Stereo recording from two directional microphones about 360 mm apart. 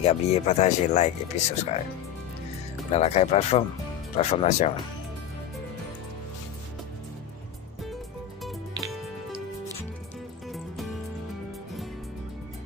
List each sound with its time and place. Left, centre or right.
0.0 s speech: centre
2.9 s speech: centre